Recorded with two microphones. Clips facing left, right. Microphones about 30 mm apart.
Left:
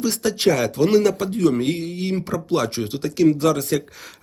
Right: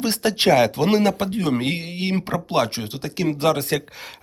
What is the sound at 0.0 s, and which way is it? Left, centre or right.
Speech, right.